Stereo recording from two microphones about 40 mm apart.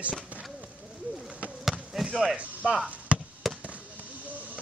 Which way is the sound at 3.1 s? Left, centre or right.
Right.